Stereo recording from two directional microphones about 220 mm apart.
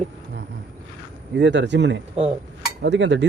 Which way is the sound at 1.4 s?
50° right (ahead or behind).